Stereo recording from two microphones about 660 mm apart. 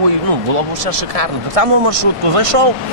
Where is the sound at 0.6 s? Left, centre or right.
Right.